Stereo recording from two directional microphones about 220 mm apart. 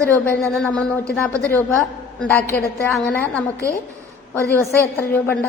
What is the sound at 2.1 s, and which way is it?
A woman's voice, 10° left (ahead or behind).